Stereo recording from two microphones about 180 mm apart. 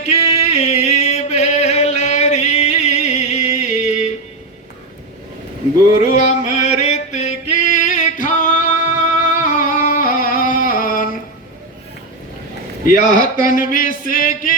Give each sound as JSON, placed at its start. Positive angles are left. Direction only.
{"t": 0.0, "sound": "music", "side_deg": 40}
{"t": 6.0, "sound": "male singing", "side_deg": 40}
{"t": 13.3, "sound": "a sound", "side_deg": 50}